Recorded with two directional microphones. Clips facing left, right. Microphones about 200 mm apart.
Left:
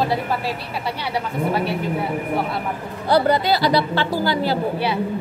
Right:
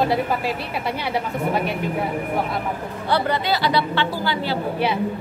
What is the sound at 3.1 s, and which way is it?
A woman's voice, 40° left (ahead or behind).